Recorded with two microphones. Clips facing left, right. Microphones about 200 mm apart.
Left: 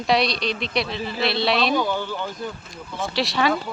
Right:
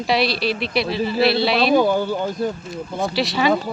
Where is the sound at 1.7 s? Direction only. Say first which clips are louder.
Right 7 dB; 45° right (ahead or behind).